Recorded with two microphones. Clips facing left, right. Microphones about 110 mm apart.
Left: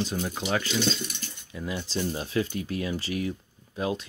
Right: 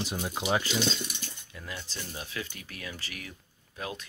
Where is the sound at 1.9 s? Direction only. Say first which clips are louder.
Left 13 dB; 35° left (ahead or behind).